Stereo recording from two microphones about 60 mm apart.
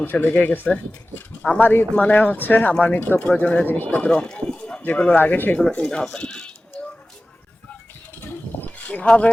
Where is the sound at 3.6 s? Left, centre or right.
Left.